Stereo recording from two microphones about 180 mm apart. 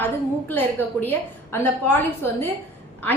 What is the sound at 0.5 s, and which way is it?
Speech, 10° left (ahead or behind).